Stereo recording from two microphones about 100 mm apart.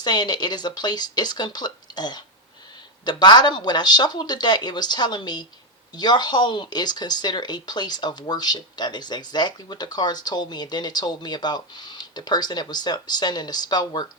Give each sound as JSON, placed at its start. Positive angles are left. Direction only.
{"t": 0.0, "sound": "speech", "side_deg": 45}